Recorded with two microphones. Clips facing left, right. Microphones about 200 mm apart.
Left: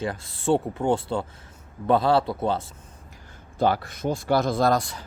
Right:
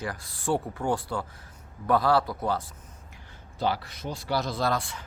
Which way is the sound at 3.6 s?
50° left (ahead or behind).